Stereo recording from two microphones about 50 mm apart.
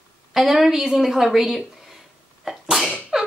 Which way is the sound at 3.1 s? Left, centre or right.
Centre.